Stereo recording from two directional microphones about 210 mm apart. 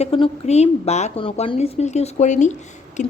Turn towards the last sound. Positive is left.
turn(degrees=35)  # may be behind; listen again after turning